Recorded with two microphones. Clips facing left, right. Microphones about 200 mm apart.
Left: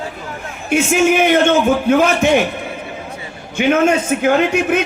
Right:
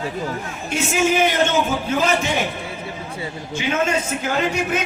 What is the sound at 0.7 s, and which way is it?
A man's voice, 55° left (ahead or behind).